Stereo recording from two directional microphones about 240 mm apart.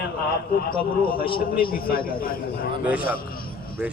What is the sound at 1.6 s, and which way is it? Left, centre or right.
A man's voice, left.